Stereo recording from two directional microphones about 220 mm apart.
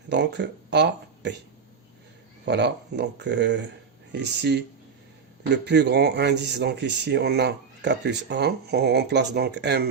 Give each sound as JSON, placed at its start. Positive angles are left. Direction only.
{"t": 0.1, "sound": "speech", "side_deg": -50}
{"t": 2.4, "sound": "speech", "side_deg": -50}